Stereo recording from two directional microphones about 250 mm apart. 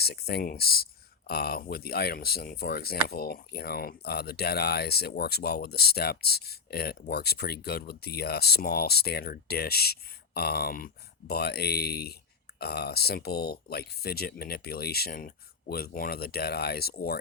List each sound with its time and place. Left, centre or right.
0.0 s speech: left